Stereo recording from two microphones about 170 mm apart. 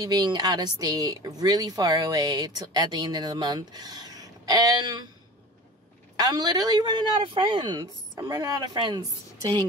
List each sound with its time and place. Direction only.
0.0 s speech: 25° right (ahead or behind)
6.1 s speech: 25° right (ahead or behind)